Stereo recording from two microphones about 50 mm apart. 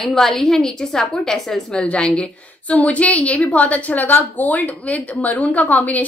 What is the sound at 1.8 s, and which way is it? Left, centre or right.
A woman's voice, centre.